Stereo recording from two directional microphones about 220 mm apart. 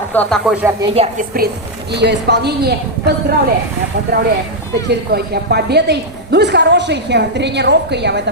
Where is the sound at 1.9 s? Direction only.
50° right (ahead or behind).